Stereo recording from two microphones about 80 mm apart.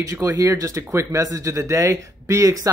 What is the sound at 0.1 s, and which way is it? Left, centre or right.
Speech, right.